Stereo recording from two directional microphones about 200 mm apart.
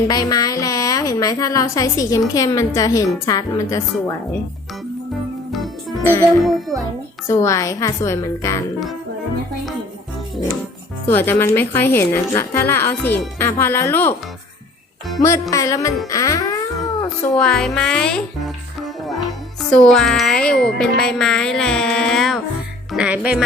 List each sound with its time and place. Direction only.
0.1 s a woman's voice: 20° left (ahead or behind)
6.4 s speech: centre (ahead or behind)
7.3 s a woman's voice: 15° left (ahead or behind)
11.0 s a woman's voice: 10° left (ahead or behind)
15.2 s a woman's voice: 15° left (ahead or behind)
17.3 s speech: 5° left (ahead or behind)
19.7 s speech: 5° left (ahead or behind)